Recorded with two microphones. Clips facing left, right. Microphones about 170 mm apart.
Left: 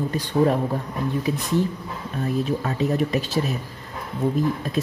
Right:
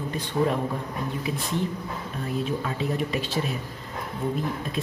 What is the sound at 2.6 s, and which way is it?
Speech, 40° left (ahead or behind).